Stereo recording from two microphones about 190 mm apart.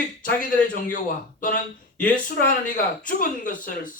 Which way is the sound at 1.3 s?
45° left (ahead or behind).